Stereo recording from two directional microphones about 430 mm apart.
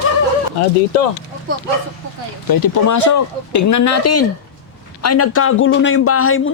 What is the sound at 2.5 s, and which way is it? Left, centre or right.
A man's voice, left.